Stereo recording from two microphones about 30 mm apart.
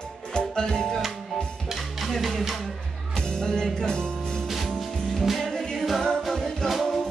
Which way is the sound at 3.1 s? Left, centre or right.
Left.